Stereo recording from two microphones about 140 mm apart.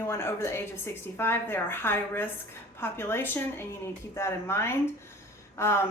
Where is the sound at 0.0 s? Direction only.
15° left (ahead or behind).